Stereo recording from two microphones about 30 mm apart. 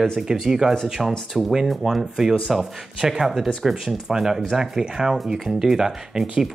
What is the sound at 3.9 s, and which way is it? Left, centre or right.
A man's voice, centre.